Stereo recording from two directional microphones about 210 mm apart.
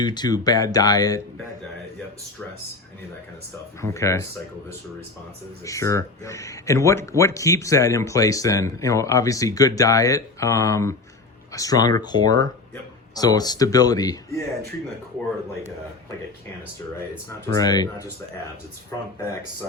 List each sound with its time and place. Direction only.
0.0 s speech: 20° left (ahead or behind)
3.8 s speech: 15° left (ahead or behind)
5.6 s speech: 15° left (ahead or behind)
17.5 s speech: 20° left (ahead or behind)